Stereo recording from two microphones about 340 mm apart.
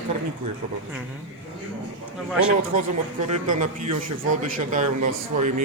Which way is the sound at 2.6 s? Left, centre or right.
Right.